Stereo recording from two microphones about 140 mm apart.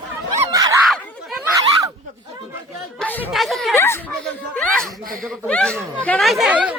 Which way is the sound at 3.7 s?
15° left (ahead or behind).